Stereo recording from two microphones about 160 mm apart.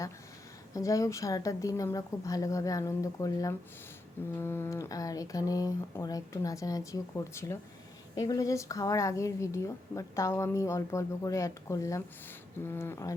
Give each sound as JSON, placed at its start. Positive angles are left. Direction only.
{"t": 0.7, "sound": "a woman's voice", "side_deg": 20}